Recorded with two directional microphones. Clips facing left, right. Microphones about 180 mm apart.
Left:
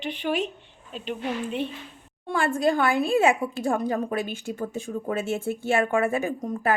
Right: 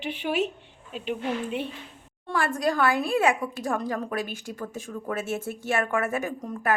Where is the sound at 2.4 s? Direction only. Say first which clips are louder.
Left 2 dB; 25° left (ahead or behind).